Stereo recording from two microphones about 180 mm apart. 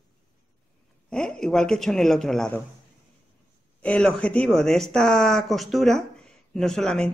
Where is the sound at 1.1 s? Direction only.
5° left (ahead or behind).